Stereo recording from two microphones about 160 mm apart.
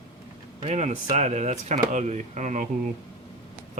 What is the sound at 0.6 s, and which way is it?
Speech, 45° right (ahead or behind).